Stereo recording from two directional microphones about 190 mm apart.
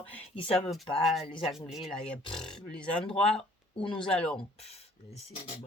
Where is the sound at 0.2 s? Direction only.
30° left (ahead or behind).